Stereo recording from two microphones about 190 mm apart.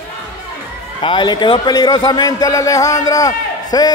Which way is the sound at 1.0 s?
25° left (ahead or behind).